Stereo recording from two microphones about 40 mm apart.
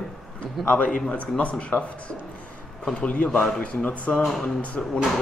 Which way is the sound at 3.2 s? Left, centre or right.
Left.